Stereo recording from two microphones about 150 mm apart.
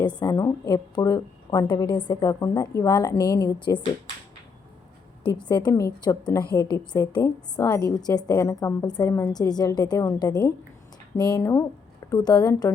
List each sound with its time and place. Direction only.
0.2 s a woman's voice: 25° left (ahead or behind)
5.5 s a woman's voice: 30° left (ahead or behind)